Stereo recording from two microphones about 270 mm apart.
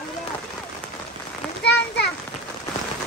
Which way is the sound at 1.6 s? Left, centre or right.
Left.